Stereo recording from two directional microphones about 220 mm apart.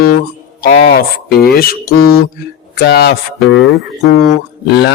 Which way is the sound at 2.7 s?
50° left (ahead or behind).